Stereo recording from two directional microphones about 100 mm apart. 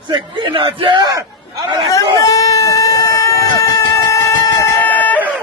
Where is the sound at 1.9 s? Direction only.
35° left (ahead or behind).